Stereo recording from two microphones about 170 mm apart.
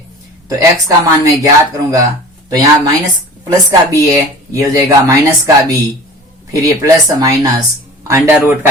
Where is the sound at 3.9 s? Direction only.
20° right (ahead or behind).